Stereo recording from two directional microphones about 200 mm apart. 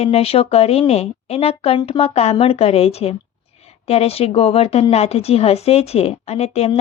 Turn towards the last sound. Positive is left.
turn(degrees=30)  # may be behind; listen again after turning